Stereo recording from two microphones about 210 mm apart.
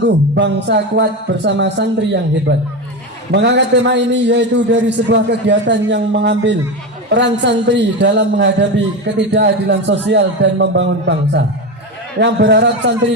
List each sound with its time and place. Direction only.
0.0 s speech: 55° right (ahead or behind)